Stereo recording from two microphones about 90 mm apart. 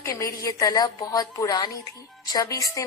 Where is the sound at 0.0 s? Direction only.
35° left (ahead or behind).